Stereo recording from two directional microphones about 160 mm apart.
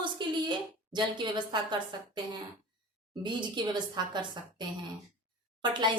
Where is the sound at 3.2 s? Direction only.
30° right (ahead or behind).